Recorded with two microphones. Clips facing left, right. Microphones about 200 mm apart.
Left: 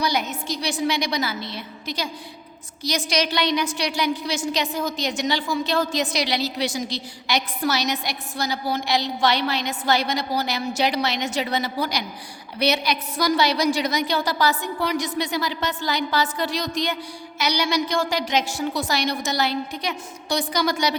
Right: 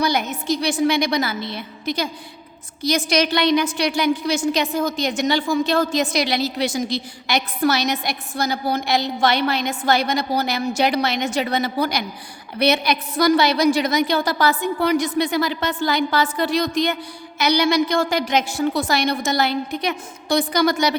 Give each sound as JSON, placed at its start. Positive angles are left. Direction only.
{"t": 0.0, "sound": "a woman's voice", "side_deg": -55}